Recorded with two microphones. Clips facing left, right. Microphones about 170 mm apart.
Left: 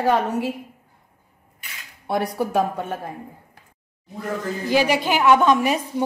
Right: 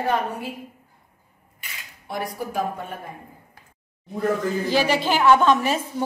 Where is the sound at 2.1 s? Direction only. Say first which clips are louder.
Left 6 dB; 75° left (ahead or behind).